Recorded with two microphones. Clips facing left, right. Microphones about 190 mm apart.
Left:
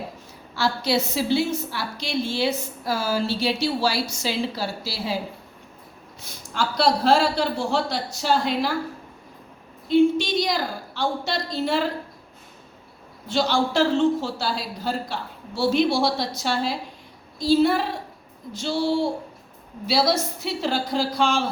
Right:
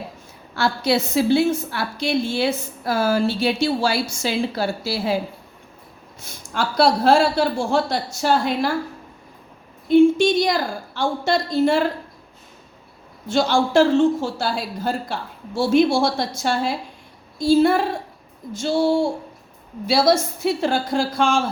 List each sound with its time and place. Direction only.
0.5 s a woman's voice: 55° right (ahead or behind)
6.2 s a man's voice: 50° right (ahead or behind)
9.9 s a man's voice: 50° right (ahead or behind)
13.2 s a man's voice: 50° right (ahead or behind)